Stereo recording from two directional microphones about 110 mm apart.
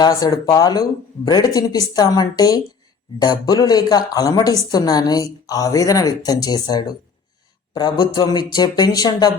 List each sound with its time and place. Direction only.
0.0 s a woman's voice: 35° left (ahead or behind)